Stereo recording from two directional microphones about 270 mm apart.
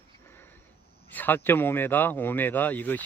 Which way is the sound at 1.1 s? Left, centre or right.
Centre.